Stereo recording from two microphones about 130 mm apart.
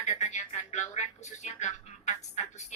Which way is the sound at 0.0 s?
60° left (ahead or behind).